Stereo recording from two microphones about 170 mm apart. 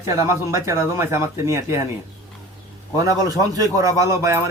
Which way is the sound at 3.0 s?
20° right (ahead or behind).